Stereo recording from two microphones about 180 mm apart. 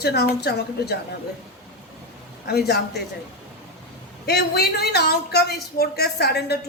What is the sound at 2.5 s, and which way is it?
Speech, 60° left (ahead or behind).